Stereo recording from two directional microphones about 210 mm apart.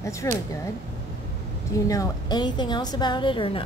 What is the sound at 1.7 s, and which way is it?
A woman's voice, 15° left (ahead or behind).